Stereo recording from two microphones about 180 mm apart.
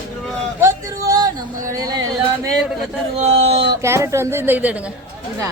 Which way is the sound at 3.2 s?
35° right (ahead or behind).